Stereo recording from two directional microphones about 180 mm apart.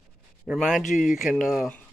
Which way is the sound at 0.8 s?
45° left (ahead or behind).